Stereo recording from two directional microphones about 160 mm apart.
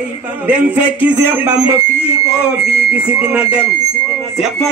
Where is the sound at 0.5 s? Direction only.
10° right (ahead or behind).